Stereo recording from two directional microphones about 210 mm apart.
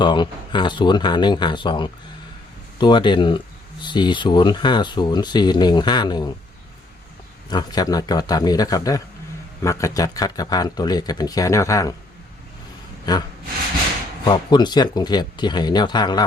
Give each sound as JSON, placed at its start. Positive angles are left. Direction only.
{"t": 0.0, "sound": "speech", "side_deg": 20}
{"t": 7.5, "sound": "speech", "side_deg": 20}
{"t": 14.3, "sound": "speech", "side_deg": 20}